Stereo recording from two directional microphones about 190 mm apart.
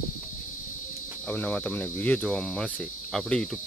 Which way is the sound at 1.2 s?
10° left (ahead or behind).